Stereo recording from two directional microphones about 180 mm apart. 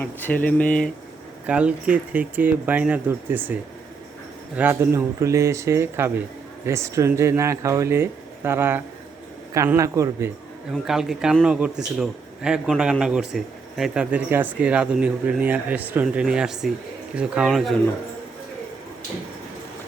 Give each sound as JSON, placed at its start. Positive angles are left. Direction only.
{"t": 0.0, "sound": "speech", "side_deg": 10}
{"t": 1.5, "sound": "speech", "side_deg": -5}
{"t": 10.7, "sound": "a man's voice", "side_deg": 0}